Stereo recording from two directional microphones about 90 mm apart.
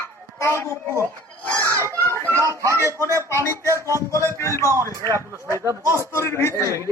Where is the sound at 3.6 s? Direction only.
35° right (ahead or behind).